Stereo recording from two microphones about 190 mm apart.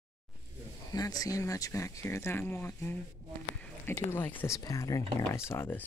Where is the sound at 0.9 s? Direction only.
20° left (ahead or behind).